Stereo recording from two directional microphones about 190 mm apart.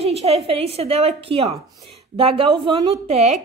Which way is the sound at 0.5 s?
30° right (ahead or behind).